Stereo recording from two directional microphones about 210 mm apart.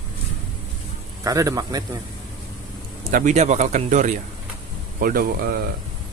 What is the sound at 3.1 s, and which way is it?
Speech, 35° right (ahead or behind).